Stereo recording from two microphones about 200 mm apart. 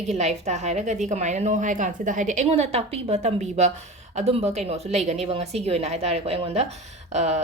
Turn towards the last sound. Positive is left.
turn(degrees=-35)  # may be behind; listen again after turning